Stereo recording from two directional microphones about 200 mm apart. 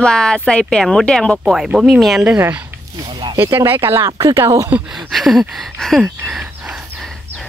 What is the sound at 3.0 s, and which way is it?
Speech, 25° right (ahead or behind).